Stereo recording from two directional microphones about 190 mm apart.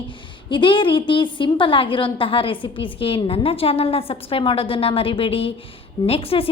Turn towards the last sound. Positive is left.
turn(degrees=30)  # may be behind; listen again after turning